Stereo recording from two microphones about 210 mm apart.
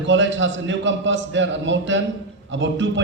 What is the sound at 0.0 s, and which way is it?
A man's voice, 60° right (ahead or behind).